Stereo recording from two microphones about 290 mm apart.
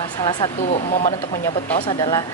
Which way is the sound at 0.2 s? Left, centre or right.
Centre.